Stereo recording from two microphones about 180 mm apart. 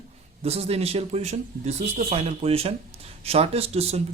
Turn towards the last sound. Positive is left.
turn(degrees=-35)  # may be behind; listen again after turning